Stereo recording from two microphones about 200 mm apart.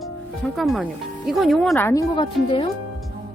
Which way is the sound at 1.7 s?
15° left (ahead or behind).